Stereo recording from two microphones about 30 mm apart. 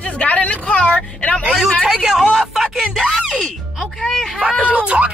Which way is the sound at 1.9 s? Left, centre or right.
Right.